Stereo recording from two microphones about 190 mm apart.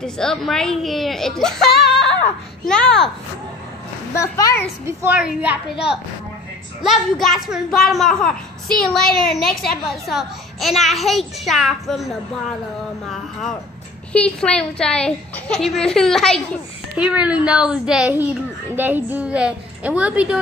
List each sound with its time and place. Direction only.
0.0 s a child's voice: 5° left (ahead or behind)
4.1 s a child's voice: 15° left (ahead or behind)
4.8 s a child's voice: 10° right (ahead or behind)